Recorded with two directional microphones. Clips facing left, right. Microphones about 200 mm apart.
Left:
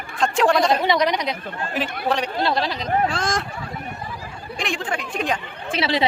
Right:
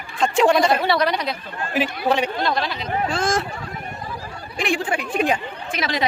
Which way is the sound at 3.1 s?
5° right (ahead or behind).